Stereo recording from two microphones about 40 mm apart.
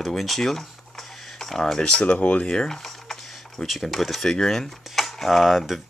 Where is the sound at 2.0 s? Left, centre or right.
Left.